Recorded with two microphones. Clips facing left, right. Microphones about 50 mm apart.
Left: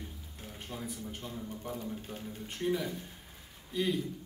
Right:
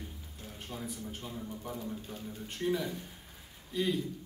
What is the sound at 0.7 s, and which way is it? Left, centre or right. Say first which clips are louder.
A man's voice: even; centre.